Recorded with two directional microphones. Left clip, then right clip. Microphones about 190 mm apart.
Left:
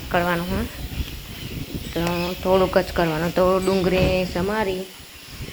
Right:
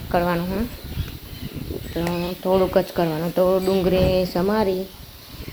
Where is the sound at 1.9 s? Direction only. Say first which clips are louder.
Left 2 dB; 5° right (ahead or behind).